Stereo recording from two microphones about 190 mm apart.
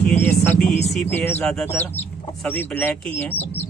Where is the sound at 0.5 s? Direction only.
10° left (ahead or behind).